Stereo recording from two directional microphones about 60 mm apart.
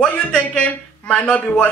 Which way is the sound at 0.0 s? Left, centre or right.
Centre.